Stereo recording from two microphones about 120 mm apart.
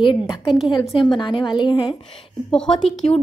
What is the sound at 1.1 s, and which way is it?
Speech, 40° left (ahead or behind).